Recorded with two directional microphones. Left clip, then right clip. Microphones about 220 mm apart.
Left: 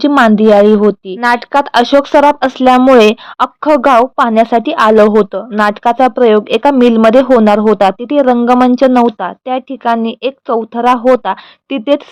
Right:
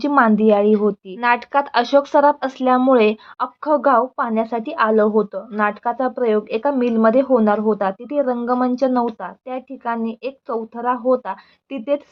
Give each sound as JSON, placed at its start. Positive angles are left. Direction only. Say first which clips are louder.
{"t": 0.0, "sound": "a woman's voice", "louder": "left 7 dB", "side_deg": 30}